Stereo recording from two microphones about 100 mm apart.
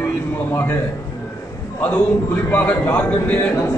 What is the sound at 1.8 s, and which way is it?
A man's voice, 20° left (ahead or behind).